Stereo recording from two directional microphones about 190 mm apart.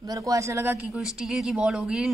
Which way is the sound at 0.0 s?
20° right (ahead or behind).